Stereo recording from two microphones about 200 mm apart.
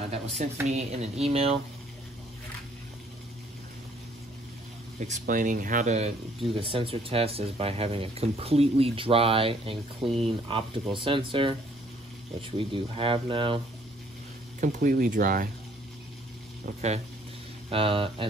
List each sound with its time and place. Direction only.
0.1 s speech: 30° right (ahead or behind)
5.0 s speech: 40° right (ahead or behind)
14.6 s speech: 40° right (ahead or behind)
17.6 s speech: 25° right (ahead or behind)